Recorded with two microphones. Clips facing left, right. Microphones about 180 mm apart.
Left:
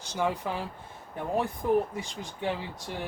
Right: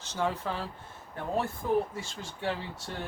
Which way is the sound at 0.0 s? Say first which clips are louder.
Left 2 dB; 15° left (ahead or behind).